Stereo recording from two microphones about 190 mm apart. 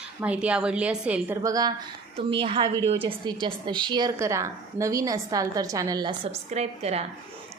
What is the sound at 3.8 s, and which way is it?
A woman's voice, 20° right (ahead or behind).